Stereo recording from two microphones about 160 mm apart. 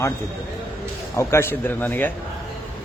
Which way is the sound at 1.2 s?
15° left (ahead or behind).